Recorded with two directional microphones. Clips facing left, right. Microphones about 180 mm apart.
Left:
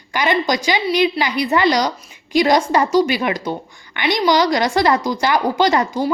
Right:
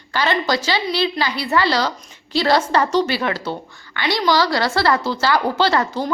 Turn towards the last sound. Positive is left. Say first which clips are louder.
# left 2 dB
turn(degrees=15)  # may be behind; listen again after turning